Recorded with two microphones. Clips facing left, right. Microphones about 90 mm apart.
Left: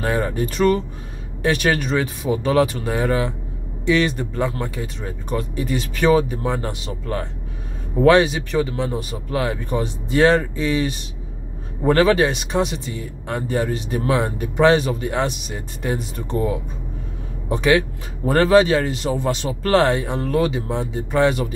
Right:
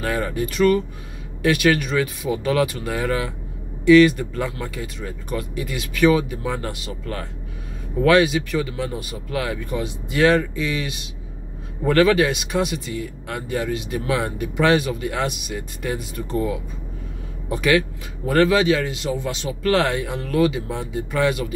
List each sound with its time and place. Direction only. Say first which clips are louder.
0.0 s speech: left 2 dB; 30° left (ahead or behind)